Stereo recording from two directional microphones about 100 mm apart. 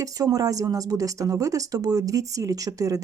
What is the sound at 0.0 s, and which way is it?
Speech, 35° right (ahead or behind).